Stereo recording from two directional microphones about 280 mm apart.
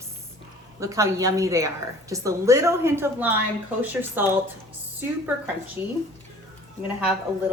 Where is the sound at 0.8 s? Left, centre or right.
Centre.